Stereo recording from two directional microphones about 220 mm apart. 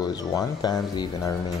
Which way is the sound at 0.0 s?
15° left (ahead or behind).